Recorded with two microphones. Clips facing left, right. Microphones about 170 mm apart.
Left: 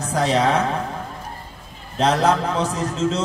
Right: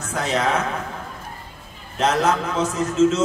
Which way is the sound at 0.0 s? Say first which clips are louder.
Left 4 dB; 35° left (ahead or behind).